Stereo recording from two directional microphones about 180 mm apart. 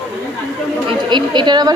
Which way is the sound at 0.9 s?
25° right (ahead or behind).